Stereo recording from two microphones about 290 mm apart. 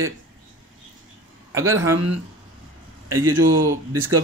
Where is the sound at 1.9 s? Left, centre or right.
Right.